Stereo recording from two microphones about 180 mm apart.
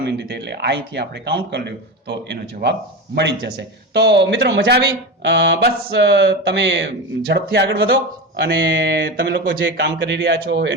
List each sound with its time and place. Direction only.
0.0 s speech: 70° right (ahead or behind)
8.4 s mantra: 90° right
9.6 s speech: 90° right; by 10.7 s 75° right (ahead or behind)